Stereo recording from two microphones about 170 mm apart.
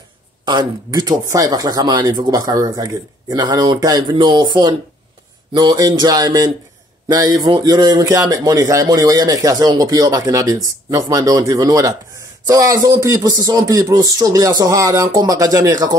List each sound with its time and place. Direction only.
0.5 s speech: 25° right (ahead or behind)